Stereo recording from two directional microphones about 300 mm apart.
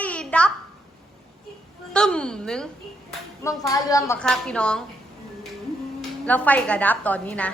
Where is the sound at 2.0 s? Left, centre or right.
Centre.